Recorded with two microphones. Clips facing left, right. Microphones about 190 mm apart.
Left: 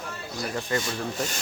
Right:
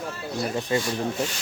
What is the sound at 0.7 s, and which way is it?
Rub, 20° right (ahead or behind).